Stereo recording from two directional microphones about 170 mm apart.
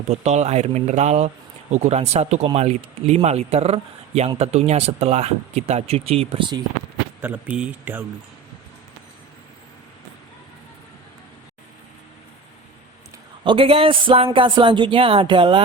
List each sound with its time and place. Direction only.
0.1 s speech: 40° right (ahead or behind)
7.2 s speech: 10° right (ahead or behind)
13.4 s speech: 30° right (ahead or behind)